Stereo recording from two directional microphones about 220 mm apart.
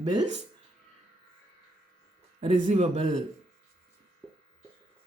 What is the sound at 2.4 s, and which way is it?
Speech, 30° right (ahead or behind).